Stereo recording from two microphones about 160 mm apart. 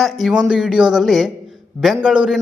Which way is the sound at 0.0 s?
Centre (ahead or behind).